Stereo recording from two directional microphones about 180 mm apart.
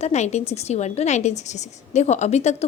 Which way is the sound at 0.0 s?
40° left (ahead or behind).